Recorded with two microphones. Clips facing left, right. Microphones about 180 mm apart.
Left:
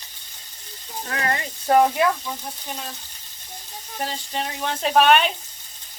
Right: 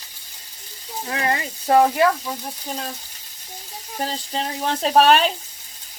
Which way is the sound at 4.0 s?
35° right (ahead or behind).